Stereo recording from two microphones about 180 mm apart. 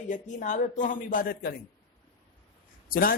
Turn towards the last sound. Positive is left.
turn(degrees=55)  # may be behind; listen again after turning